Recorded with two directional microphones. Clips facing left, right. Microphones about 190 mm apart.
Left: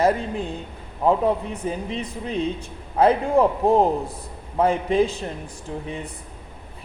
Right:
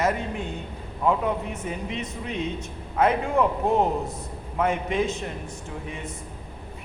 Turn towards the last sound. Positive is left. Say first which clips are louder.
# left 4 dB
turn(degrees=35)  # may be behind; listen again after turning